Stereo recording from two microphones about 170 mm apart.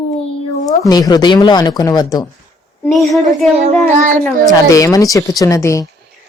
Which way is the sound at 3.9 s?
50° right (ahead or behind).